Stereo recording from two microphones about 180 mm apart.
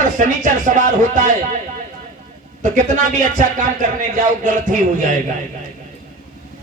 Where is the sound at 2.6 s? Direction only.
45° right (ahead or behind).